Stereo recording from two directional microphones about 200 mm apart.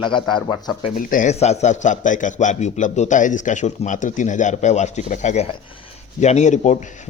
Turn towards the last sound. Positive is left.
turn(degrees=35)  # may be behind; listen again after turning